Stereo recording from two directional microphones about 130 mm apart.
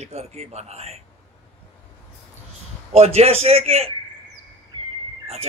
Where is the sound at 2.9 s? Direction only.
55° right (ahead or behind).